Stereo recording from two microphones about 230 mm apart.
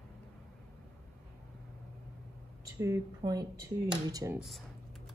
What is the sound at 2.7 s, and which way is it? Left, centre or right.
Speech, centre.